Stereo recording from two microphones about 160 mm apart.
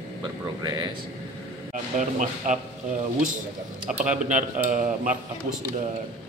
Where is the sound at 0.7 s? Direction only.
25° right (ahead or behind).